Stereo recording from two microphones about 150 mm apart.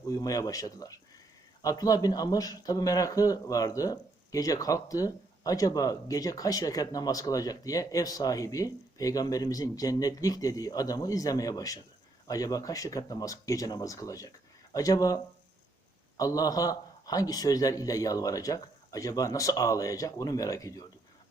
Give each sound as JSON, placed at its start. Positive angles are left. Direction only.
{"t": 0.2, "sound": "speech", "side_deg": 25}